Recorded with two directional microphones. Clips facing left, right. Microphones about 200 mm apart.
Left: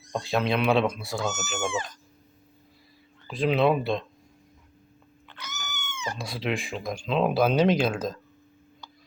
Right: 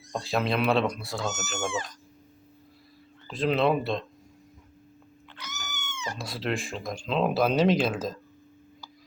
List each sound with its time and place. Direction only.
0.1 s speech: centre (ahead or behind)
3.2 s speech: centre (ahead or behind)
5.7 s cat: 55° left (ahead or behind)
6.1 s speech: centre (ahead or behind)